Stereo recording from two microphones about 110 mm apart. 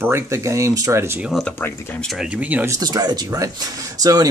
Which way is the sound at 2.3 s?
15° right (ahead or behind).